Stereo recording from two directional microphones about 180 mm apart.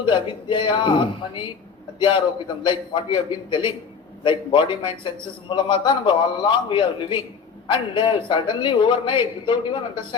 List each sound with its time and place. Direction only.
0.0 s a man's voice: 25° left (ahead or behind)
4.2 s a man's voice: 25° left (ahead or behind)